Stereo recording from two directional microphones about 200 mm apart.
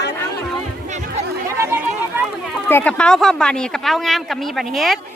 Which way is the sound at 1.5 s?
10° right (ahead or behind).